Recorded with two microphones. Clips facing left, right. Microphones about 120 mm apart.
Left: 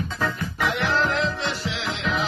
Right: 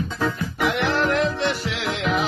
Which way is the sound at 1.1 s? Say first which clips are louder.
Right 4 dB; 55° right (ahead or behind).